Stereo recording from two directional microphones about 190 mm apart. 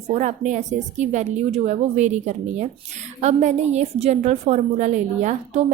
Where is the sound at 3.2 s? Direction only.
35° right (ahead or behind).